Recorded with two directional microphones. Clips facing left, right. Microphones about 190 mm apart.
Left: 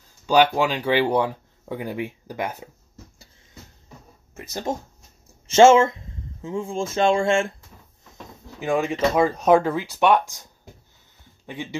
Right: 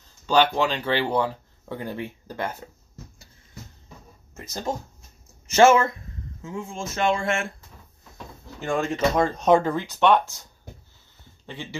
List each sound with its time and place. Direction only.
0.3 s speech: 10° left (ahead or behind)
5.5 s speech: 25° left (ahead or behind)
8.5 s speech: 5° left (ahead or behind)
11.4 s speech: 15° left (ahead or behind)